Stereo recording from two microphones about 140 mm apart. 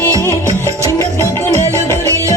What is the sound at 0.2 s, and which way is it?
Music, 20° left (ahead or behind).